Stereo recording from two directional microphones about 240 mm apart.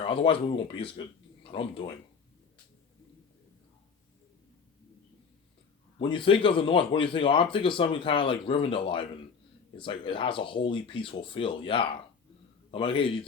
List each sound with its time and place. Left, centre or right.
0.0 s speech: left
6.0 s speech: left